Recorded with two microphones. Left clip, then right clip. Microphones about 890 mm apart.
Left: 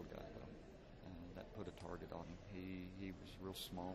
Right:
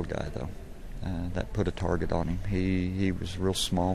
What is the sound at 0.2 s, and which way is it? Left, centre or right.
Speech, right.